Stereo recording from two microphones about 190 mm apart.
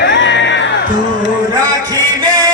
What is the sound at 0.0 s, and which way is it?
Music, 70° left (ahead or behind).